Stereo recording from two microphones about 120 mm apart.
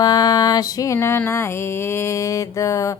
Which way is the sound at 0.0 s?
35° left (ahead or behind).